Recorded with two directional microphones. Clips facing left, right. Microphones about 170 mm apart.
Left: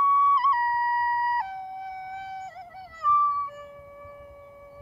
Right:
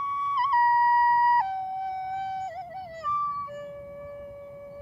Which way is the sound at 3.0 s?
30° right (ahead or behind).